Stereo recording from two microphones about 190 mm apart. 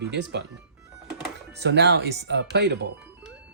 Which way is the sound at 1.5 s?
65° right (ahead or behind).